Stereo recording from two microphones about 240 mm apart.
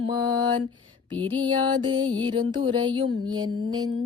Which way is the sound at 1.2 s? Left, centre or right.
Centre.